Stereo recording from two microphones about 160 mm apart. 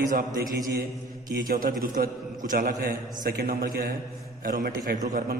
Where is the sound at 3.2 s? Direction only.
70° right (ahead or behind).